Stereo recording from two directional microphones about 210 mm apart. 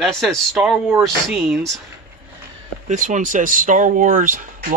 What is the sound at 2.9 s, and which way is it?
Speech, 35° right (ahead or behind).